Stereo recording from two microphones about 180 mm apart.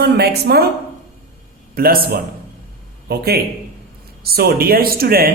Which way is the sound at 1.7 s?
55° right (ahead or behind).